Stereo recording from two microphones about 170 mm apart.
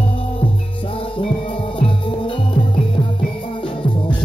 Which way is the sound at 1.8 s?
30° left (ahead or behind).